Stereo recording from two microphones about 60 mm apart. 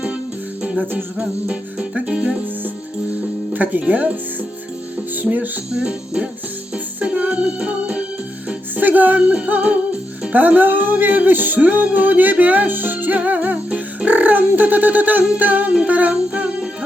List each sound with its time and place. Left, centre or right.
0.6 s music: right
1.2 s music: centre
3.5 s music: right
5.1 s speech: right
5.7 s music: centre
8.7 s music: right